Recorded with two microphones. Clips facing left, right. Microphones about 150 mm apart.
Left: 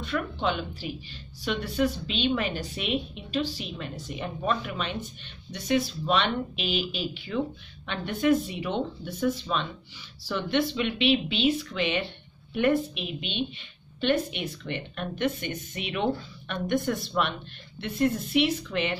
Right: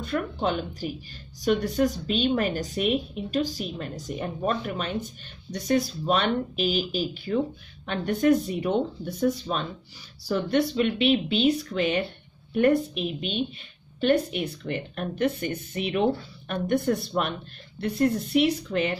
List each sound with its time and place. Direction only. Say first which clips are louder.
0.0 s speech: right 2 dB; 40° right (ahead or behind)